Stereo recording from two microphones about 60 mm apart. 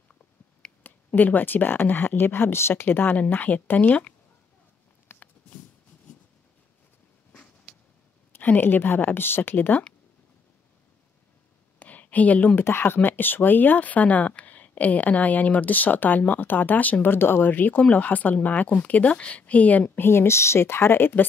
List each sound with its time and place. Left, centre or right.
0.8 s speech: left
5.1 s a sound: left
8.4 s speech: left
11.8 s a sound: left
12.5 s speech: left
20.1 s speech: left